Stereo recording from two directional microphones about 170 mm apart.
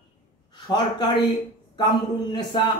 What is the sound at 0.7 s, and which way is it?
A man's voice, 25° left (ahead or behind).